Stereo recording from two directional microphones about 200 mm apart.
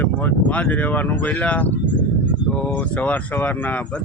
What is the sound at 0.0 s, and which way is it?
Speech, 5° left (ahead or behind).